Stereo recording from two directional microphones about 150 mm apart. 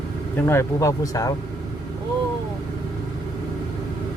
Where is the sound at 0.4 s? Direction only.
20° left (ahead or behind).